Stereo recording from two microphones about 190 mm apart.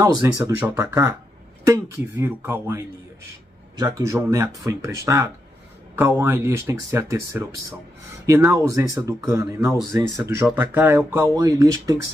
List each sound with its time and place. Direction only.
0.2 s speech: 10° right (ahead or behind)
8.5 s speech: 15° right (ahead or behind)